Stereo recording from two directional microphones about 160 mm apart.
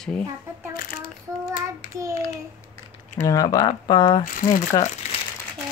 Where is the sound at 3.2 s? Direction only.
20° left (ahead or behind).